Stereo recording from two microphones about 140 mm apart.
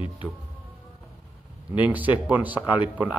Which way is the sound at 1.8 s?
10° right (ahead or behind).